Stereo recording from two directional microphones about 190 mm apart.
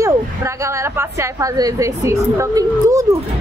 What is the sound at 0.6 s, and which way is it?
A woman's voice, 15° right (ahead or behind).